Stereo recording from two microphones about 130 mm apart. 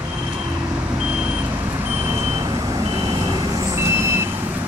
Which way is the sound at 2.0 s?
30° right (ahead or behind).